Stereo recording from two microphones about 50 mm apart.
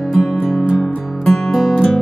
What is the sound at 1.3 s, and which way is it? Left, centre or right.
Music, centre.